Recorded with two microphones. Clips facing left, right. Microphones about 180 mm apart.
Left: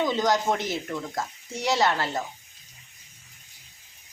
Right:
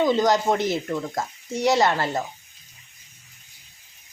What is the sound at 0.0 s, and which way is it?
Speech, 10° right (ahead or behind).